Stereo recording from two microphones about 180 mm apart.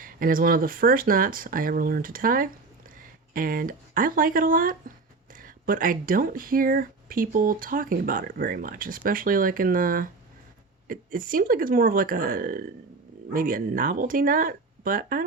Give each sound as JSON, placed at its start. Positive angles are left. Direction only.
{"t": 0.0, "sound": "speech", "side_deg": -50}